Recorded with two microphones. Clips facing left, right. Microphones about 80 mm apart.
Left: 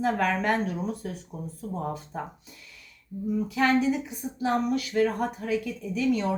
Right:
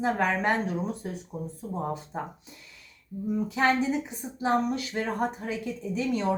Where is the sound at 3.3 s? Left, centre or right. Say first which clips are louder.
Left 1 dB; right.